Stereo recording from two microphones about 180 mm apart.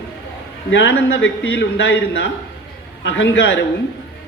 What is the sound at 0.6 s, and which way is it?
Speech, 80° left.